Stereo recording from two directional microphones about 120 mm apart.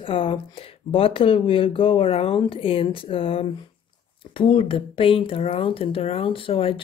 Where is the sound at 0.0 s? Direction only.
45° left (ahead or behind).